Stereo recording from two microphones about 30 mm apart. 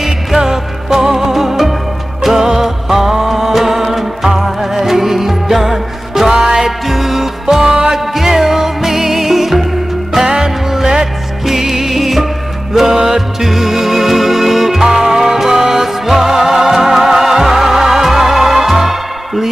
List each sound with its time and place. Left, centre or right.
0.4 s music: centre
6.3 s music: right
6.9 s music: centre
8.0 s music: centre
10.2 s music: right
11.4 s music: centre
12.7 s music: centre